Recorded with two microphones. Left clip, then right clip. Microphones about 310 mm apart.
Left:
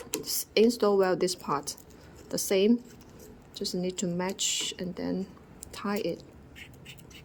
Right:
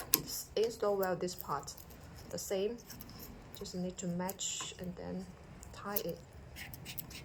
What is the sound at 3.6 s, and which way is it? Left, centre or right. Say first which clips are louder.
Speech: left 11 dB; left.